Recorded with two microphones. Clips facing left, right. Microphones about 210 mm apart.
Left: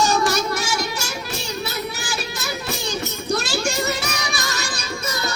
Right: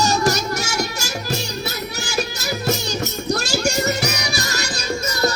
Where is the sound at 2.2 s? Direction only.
35° right (ahead or behind).